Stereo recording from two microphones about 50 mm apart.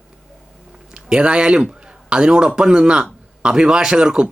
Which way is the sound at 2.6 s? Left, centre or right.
Centre.